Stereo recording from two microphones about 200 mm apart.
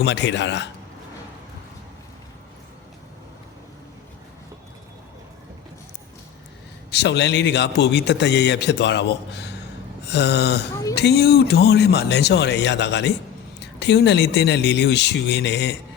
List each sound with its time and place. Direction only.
0.0 s a man's voice: 60° left (ahead or behind)
6.9 s a man's voice: 60° left (ahead or behind)